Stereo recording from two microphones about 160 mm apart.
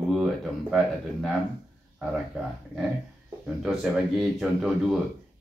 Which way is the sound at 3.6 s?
Centre (ahead or behind).